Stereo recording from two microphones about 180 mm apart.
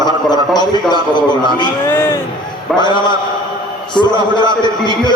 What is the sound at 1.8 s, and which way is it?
Speech, 15° left (ahead or behind).